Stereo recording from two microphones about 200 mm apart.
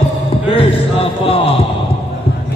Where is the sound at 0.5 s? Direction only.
30° left (ahead or behind).